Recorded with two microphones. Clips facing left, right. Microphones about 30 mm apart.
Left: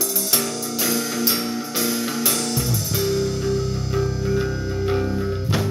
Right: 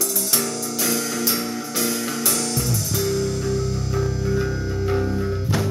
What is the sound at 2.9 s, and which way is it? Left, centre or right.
Music, left.